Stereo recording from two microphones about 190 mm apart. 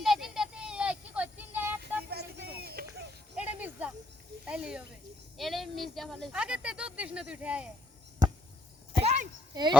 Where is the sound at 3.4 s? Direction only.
10° right (ahead or behind).